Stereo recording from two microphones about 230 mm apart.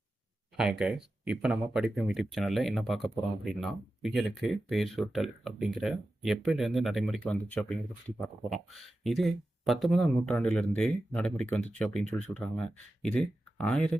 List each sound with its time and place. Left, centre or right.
0.5 s speech: centre